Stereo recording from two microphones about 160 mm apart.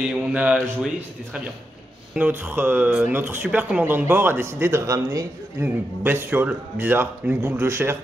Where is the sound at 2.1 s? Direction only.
10° right (ahead or behind).